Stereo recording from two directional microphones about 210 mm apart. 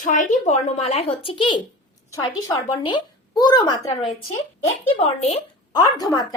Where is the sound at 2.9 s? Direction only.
20° left (ahead or behind).